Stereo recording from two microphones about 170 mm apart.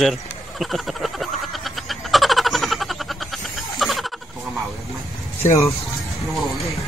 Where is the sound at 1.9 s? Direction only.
Centre (ahead or behind).